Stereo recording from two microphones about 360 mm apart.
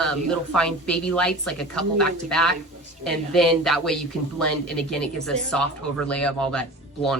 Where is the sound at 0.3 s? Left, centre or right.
Centre.